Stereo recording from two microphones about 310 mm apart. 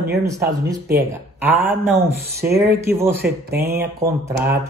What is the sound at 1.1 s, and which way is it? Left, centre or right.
Speech, centre.